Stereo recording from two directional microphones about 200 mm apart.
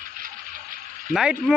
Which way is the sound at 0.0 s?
45° right (ahead or behind).